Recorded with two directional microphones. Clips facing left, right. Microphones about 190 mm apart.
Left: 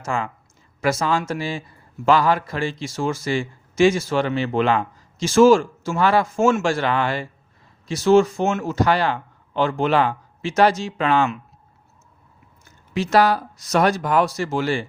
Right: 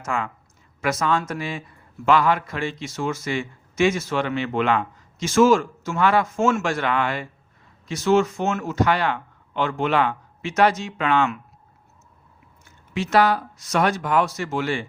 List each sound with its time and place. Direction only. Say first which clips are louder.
0.0 s a man's voice: left 2 dB; 30° left (ahead or behind)
12.6 s a man's voice: left 3 dB; 35° left (ahead or behind)